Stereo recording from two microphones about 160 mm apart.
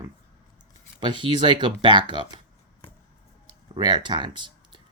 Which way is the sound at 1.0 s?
30° right (ahead or behind).